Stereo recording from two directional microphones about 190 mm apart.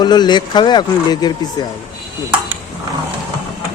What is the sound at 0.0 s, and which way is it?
Speech, 20° left (ahead or behind).